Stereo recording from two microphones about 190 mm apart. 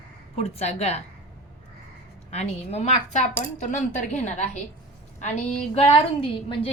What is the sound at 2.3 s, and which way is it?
A woman's voice, 35° left (ahead or behind).